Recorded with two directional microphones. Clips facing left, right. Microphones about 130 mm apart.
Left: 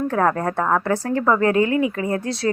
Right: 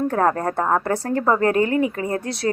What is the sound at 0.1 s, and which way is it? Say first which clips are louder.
A woman's voice: even; 35° right (ahead or behind).